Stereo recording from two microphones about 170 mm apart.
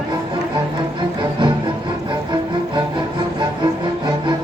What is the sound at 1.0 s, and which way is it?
Music, 30° right (ahead or behind).